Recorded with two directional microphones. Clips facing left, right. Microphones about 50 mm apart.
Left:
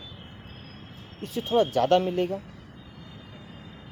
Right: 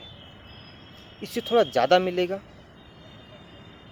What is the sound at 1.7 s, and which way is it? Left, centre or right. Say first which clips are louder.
Speech: right 2 dB; right.